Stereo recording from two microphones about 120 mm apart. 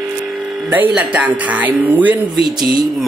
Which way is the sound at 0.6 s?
15° right (ahead or behind).